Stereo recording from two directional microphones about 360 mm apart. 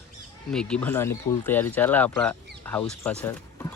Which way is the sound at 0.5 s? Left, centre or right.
Centre.